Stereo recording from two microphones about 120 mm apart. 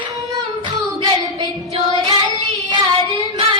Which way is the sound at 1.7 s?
40° right (ahead or behind).